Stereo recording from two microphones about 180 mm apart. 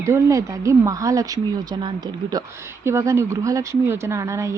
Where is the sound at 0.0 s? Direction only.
15° right (ahead or behind).